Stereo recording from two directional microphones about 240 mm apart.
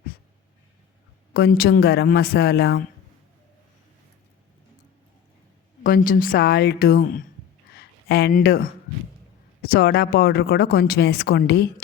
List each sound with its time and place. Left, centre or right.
1.3 s speech: left
5.8 s speech: left